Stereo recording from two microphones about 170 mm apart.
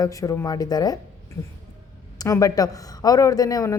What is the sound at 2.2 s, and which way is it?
A woman's voice, 20° left (ahead or behind).